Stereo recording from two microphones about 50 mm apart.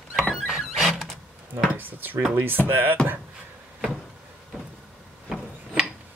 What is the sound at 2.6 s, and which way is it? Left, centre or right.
Speech, right.